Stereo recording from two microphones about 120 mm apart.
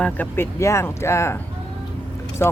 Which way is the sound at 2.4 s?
20° left (ahead or behind).